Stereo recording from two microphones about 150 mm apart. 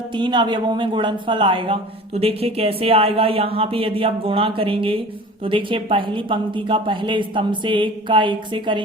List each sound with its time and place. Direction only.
0.1 s speech: 30° right (ahead or behind)